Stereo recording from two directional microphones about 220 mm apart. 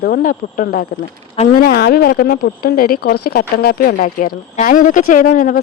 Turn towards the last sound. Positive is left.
turn(degrees=35)  # may be behind; listen again after turning